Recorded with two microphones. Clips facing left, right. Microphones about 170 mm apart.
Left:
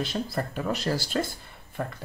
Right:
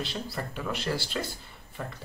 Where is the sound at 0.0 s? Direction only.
45° left (ahead or behind).